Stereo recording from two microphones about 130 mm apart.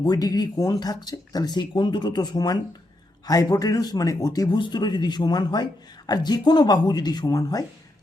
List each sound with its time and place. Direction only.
0.0 s speech: 30° left (ahead or behind)